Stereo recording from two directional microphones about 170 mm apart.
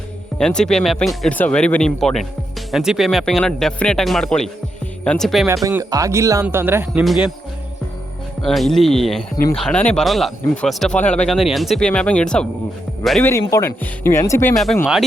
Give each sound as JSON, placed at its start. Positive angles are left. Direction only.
{"t": 0.3, "sound": "speech", "side_deg": 5}
{"t": 5.6, "sound": "speech", "side_deg": -20}
{"t": 8.4, "sound": "speech", "side_deg": 0}
{"t": 13.5, "sound": "speech", "side_deg": 15}
{"t": 14.5, "sound": "speech", "side_deg": 0}